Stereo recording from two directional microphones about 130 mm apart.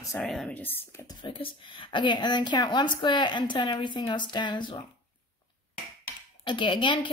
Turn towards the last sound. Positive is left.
turn(degrees=40)  # may be behind; listen again after turning